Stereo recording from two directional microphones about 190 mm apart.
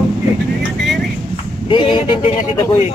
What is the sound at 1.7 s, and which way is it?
Speech, 25° left (ahead or behind).